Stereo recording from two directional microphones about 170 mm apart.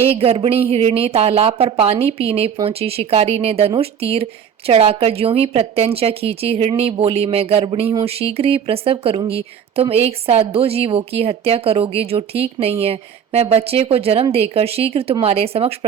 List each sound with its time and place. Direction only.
0.1 s speech: 35° right (ahead or behind)